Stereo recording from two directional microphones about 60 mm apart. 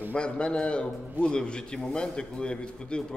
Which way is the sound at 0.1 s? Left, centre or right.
Centre.